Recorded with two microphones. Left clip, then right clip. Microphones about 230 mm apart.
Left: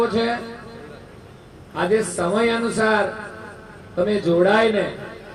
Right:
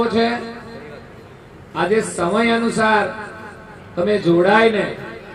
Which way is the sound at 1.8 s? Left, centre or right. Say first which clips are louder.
Right 2 dB; right.